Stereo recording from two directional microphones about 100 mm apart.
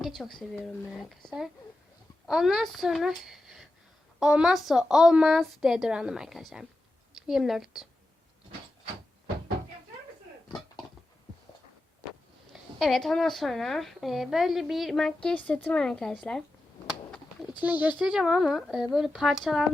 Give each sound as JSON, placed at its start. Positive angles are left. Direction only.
{"t": 0.0, "sound": "a woman's voice", "side_deg": 0}
{"t": 12.8, "sound": "a woman's voice", "side_deg": 0}
{"t": 17.6, "sound": "a woman's voice", "side_deg": -15}